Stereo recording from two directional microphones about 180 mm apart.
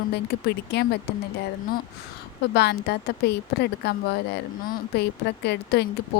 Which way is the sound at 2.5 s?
65° left (ahead or behind).